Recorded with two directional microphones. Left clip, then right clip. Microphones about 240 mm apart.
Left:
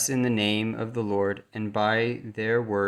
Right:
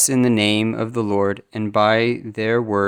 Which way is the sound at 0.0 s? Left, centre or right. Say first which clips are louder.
Right 8 dB; right.